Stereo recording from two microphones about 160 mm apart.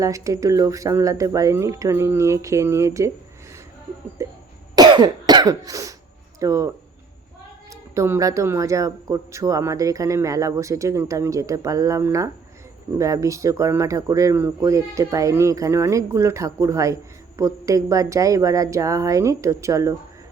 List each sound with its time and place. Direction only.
0.0 s speech: 20° right (ahead or behind)
4.2 s cough: 20° right (ahead or behind)
6.4 s speech: 20° right (ahead or behind)
7.7 s speech: 15° right (ahead or behind)